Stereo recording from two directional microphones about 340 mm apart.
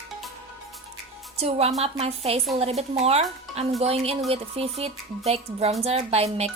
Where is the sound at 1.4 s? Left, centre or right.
Centre.